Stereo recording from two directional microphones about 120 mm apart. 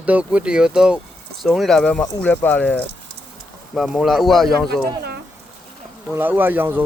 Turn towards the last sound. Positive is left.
turn(degrees=-15)  # may be behind; listen again after turning